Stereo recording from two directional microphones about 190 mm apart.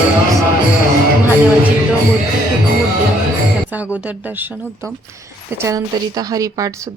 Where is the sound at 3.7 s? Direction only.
10° right (ahead or behind).